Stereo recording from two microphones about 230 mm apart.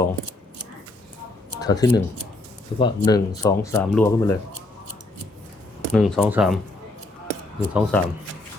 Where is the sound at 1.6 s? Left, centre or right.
Centre.